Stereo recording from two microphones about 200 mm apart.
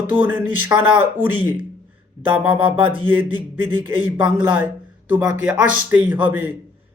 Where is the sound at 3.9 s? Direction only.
10° right (ahead or behind).